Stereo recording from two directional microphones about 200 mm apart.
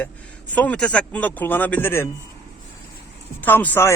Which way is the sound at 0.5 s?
5° left (ahead or behind).